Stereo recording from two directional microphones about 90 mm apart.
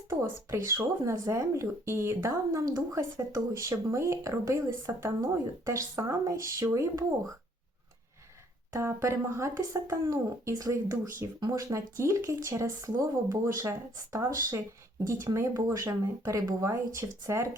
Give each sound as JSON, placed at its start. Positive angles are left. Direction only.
{"t": 0.1, "sound": "speech", "side_deg": -35}
{"t": 8.7, "sound": "speech", "side_deg": -30}